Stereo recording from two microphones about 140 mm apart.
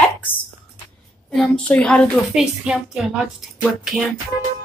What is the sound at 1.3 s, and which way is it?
Speech, centre (ahead or behind).